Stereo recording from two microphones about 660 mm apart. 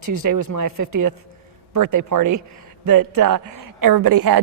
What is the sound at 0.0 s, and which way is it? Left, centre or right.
A woman's voice, right.